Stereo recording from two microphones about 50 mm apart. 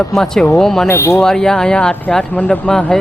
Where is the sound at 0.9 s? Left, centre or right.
Left.